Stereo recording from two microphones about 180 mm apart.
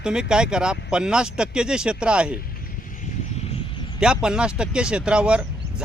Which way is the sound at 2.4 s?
50° left (ahead or behind).